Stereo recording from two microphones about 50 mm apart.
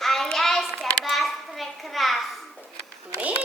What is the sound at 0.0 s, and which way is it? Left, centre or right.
Hands, centre.